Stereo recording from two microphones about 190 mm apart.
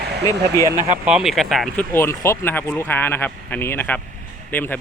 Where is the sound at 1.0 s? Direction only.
Centre (ahead or behind).